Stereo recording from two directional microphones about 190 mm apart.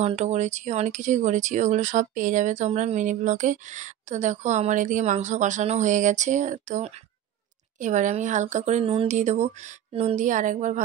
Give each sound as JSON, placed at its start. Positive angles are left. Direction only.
{"t": 0.0, "sound": "speech", "side_deg": -35}